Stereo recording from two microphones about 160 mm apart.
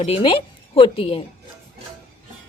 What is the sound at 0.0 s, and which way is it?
A woman's voice, 35° left (ahead or behind).